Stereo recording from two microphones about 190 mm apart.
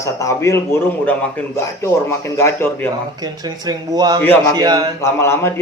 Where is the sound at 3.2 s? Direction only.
20° right (ahead or behind).